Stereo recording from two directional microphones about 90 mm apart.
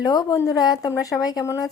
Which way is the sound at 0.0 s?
45° left (ahead or behind).